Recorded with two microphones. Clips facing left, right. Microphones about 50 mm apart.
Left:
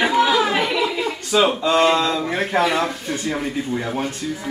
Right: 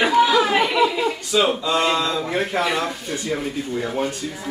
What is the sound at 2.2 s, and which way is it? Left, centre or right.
Speech, centre.